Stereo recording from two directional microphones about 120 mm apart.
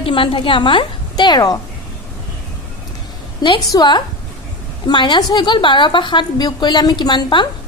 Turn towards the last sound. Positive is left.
turn(degrees=40)  # may be behind; listen again after turning